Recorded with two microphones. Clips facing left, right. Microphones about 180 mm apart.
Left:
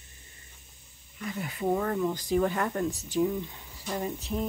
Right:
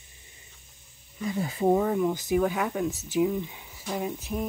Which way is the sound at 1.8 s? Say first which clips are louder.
Right 4 dB; 10° right (ahead or behind).